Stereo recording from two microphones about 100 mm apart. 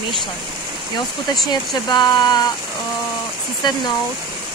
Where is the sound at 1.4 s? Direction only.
45° left (ahead or behind).